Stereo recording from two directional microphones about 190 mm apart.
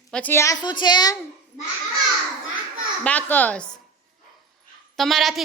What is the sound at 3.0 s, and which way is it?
Speech, 10° left (ahead or behind).